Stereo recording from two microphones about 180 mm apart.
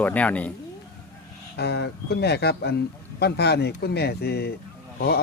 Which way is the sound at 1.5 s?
65° left (ahead or behind).